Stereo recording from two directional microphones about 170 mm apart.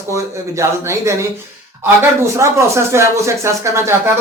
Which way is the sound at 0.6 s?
15° right (ahead or behind).